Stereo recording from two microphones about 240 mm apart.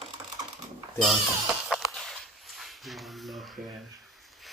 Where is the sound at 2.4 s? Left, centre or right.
Centre.